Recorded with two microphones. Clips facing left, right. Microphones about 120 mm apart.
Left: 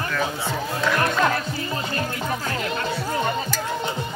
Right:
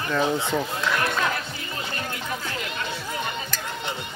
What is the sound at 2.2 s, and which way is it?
Music, 40° left (ahead or behind).